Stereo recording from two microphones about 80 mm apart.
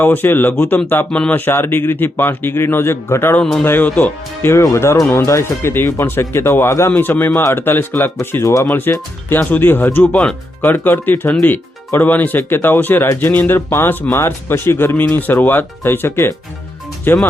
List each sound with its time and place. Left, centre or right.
0.0 s speech: left
4.5 s speech: left
7.0 s speech: left